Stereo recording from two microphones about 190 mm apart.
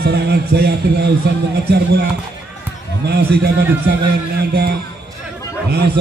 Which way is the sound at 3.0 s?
55° right (ahead or behind).